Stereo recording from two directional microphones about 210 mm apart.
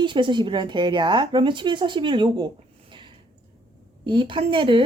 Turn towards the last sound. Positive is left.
turn(degrees=-25)  # may be behind; listen again after turning